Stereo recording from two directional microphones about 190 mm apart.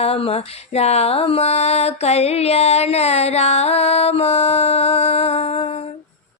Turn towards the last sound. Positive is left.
turn(degrees=35)  # may be behind; listen again after turning